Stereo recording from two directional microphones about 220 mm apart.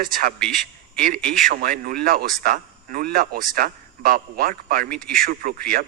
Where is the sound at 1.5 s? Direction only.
45° right (ahead or behind).